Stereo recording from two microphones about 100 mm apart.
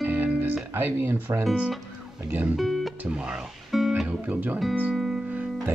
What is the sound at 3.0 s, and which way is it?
Music, 10° right (ahead or behind).